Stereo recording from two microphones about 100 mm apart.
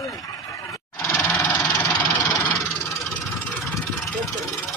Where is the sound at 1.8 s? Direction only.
35° left (ahead or behind).